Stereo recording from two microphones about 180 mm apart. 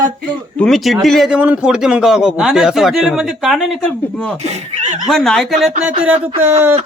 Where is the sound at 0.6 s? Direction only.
Centre (ahead or behind).